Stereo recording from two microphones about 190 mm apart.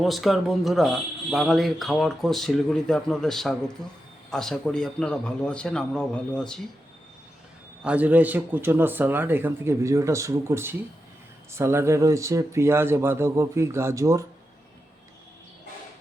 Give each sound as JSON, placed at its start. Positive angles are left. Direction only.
{"t": 0.0, "sound": "speech", "side_deg": 0}
{"t": 7.9, "sound": "a man's voice", "side_deg": -10}